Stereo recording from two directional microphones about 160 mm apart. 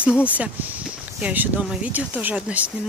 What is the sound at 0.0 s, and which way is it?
Speech, 10° right (ahead or behind).